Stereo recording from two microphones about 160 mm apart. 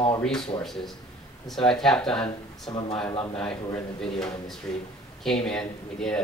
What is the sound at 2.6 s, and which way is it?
Speech, 30° left (ahead or behind).